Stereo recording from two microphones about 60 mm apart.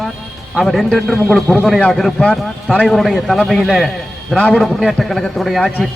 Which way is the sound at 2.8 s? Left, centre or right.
Centre.